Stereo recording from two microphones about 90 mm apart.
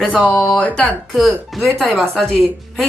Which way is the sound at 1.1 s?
Centre (ahead or behind).